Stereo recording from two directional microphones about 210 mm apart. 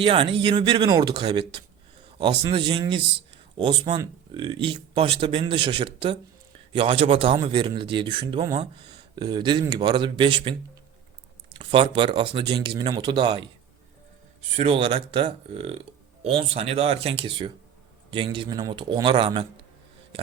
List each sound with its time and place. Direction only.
0.0 s a man's voice: 25° right (ahead or behind)
11.5 s a man's voice: 25° right (ahead or behind)
14.5 s a man's voice: 25° right (ahead or behind)